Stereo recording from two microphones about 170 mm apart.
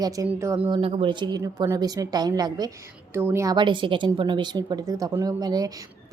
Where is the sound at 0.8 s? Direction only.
35° right (ahead or behind).